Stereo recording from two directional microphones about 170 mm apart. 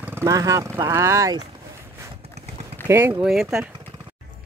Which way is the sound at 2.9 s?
15° right (ahead or behind).